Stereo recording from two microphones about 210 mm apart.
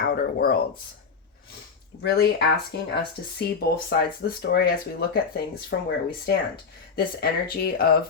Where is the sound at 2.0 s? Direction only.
55° left (ahead or behind).